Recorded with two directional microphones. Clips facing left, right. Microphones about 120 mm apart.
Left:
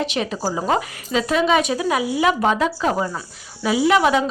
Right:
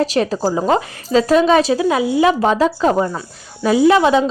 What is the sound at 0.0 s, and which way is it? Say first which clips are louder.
A woman's voice: right 6 dB; 40° right (ahead or behind).